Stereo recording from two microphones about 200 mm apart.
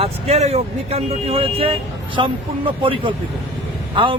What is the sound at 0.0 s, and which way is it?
Speech, 30° right (ahead or behind).